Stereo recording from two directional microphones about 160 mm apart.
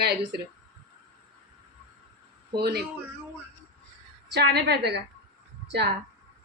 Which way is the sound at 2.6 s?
80° right.